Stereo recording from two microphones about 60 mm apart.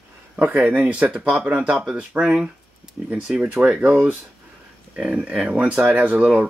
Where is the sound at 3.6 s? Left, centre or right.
Centre.